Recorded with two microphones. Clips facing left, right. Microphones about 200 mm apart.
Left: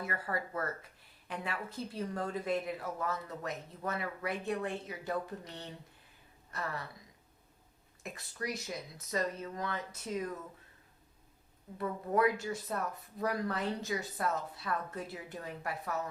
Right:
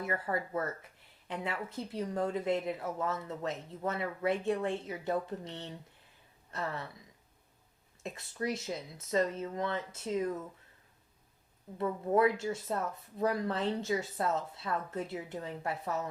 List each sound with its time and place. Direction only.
0.0 s a woman's voice: 20° right (ahead or behind)
8.0 s a woman's voice: 25° right (ahead or behind)
11.8 s a woman's voice: 25° right (ahead or behind)